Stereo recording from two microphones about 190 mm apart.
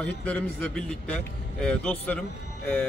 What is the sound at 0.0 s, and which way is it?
A man's voice, 5° left (ahead or behind).